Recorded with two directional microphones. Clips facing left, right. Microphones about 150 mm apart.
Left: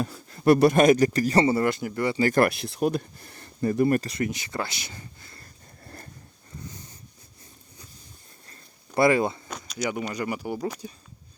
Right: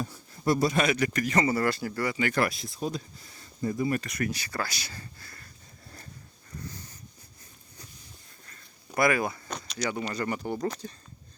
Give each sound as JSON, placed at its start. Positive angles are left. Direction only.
{"t": 0.0, "sound": "a sound", "side_deg": 75}
{"t": 0.8, "sound": "speech", "side_deg": 40}
{"t": 2.1, "sound": "speech", "side_deg": 35}
{"t": 2.4, "sound": "speech", "side_deg": 65}
{"t": 4.0, "sound": "speech", "side_deg": 25}
{"t": 5.8, "sound": "a sound", "side_deg": 55}
{"t": 9.0, "sound": "speech", "side_deg": 25}
{"t": 9.5, "sound": "a sound", "side_deg": 0}
{"t": 9.9, "sound": "speech", "side_deg": 10}